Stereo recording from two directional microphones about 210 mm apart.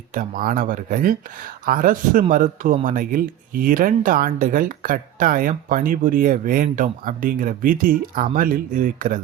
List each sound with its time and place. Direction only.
0.1 s speech: 40° right (ahead or behind)